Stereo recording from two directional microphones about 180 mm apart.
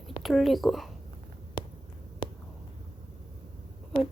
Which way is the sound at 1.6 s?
30° left (ahead or behind).